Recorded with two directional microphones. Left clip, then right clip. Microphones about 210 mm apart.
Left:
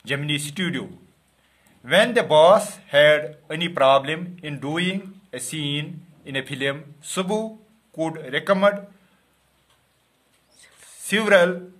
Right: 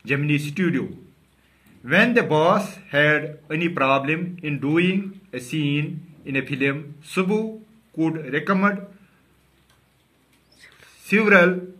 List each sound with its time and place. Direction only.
0.0 s speech: 50° left (ahead or behind)
11.1 s speech: 45° left (ahead or behind)